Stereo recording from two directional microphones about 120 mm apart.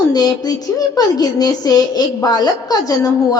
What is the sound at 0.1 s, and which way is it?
A woman's voice, 35° left (ahead or behind).